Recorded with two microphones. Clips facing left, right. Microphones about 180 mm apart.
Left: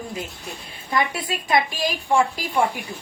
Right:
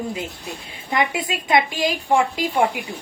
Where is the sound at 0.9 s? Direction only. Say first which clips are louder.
Right 2 dB; 20° right (ahead or behind).